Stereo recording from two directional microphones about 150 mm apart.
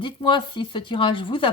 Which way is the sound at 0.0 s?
30° left (ahead or behind).